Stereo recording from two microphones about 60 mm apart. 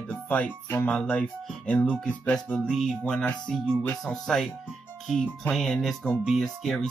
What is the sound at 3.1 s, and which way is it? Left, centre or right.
Speech, centre.